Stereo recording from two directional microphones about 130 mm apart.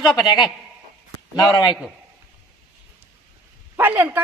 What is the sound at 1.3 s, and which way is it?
Speech, 30° left (ahead or behind).